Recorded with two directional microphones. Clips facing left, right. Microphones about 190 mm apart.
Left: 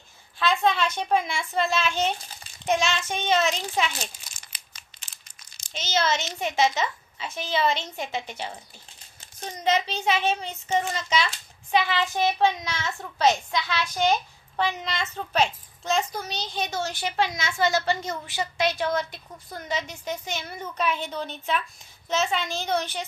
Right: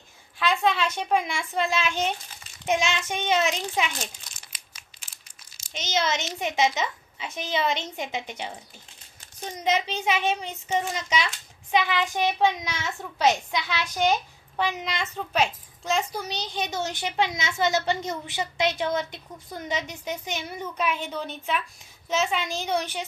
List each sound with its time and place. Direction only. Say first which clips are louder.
0.4 s a child's voice: left 1 dB; 10° right (ahead or behind)
4.4 s crushing: even; 5° right (ahead or behind)
5.6 s a child's voice: left 1 dB; 15° right (ahead or behind)
9.7 s a child's voice: left 1 dB; 15° right (ahead or behind)